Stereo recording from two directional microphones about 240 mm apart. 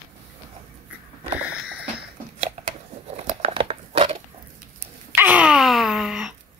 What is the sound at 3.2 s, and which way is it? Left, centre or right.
Crumpling, right.